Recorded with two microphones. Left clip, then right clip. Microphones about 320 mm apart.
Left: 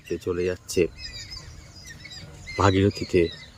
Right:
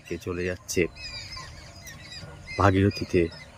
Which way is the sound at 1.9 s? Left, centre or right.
Right.